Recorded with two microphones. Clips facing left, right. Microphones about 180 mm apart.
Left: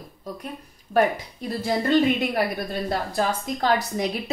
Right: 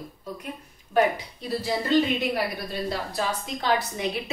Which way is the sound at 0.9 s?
50° left (ahead or behind).